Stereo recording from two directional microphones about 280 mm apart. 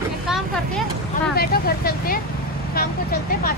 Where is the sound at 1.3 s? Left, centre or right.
Left.